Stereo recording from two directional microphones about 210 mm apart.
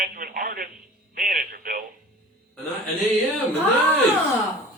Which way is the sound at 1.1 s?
40° right (ahead or behind).